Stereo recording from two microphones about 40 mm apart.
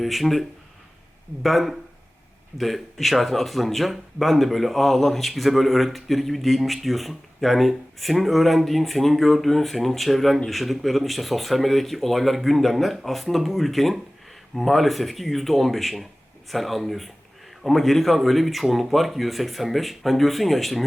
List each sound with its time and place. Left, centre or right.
0.0 s speech: centre